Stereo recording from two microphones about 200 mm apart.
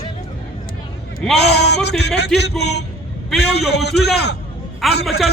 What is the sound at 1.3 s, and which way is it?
A man's voice, 55° left (ahead or behind).